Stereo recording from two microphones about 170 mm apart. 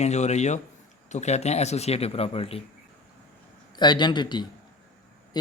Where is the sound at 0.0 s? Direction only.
40° left (ahead or behind).